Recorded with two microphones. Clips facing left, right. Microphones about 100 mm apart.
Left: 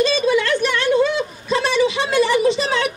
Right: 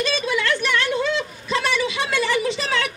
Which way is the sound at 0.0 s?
25° left (ahead or behind).